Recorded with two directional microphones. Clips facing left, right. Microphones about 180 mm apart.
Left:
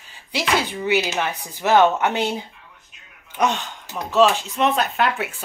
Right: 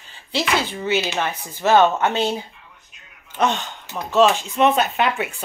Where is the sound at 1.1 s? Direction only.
15° left (ahead or behind).